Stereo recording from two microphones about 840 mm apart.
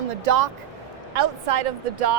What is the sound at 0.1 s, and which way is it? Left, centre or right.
Speech, right.